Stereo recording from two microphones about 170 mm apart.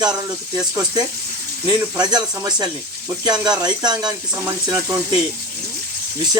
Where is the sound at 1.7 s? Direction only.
25° right (ahead or behind).